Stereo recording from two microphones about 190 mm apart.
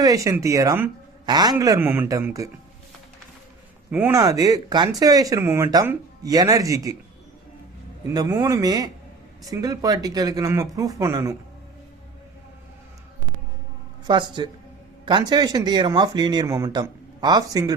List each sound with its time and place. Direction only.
0.0 s a man's voice: 20° right (ahead or behind)
3.9 s a man's voice: 10° right (ahead or behind)
8.1 s speech: 20° right (ahead or behind)
14.1 s speech: 25° right (ahead or behind)